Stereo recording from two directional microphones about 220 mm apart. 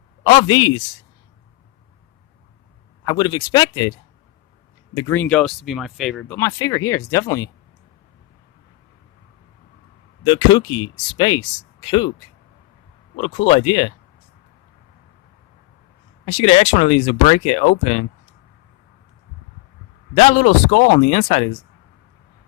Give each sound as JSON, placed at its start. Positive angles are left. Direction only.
{"t": 0.3, "sound": "speech", "side_deg": 20}
{"t": 3.0, "sound": "speech", "side_deg": 20}
{"t": 4.9, "sound": "speech", "side_deg": 10}
{"t": 10.2, "sound": "speech", "side_deg": 20}
{"t": 13.1, "sound": "speech", "side_deg": 25}
{"t": 16.2, "sound": "speech", "side_deg": 25}
{"t": 20.1, "sound": "speech", "side_deg": 30}